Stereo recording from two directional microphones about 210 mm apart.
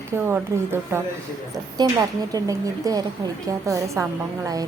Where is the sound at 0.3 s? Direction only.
10° right (ahead or behind).